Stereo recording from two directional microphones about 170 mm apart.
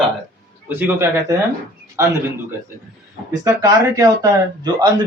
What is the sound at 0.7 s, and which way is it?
Speech, 15° right (ahead or behind).